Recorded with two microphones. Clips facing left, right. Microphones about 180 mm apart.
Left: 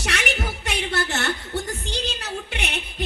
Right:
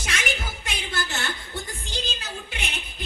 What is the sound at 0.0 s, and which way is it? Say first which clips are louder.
Music: left 4 dB; 65° left (ahead or behind).